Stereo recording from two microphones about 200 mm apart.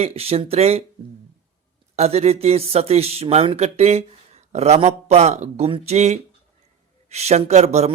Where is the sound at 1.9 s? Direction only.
35° right (ahead or behind).